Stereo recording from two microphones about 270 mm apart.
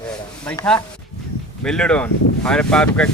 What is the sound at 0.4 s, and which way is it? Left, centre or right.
Speech, centre.